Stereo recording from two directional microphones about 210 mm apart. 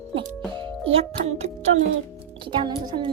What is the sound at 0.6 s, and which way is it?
Speech, 25° right (ahead or behind).